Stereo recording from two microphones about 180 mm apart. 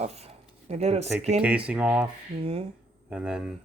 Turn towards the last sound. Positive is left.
turn(degrees=-5)  # may be behind; listen again after turning